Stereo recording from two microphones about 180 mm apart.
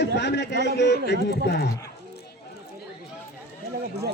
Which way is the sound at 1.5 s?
60° left (ahead or behind).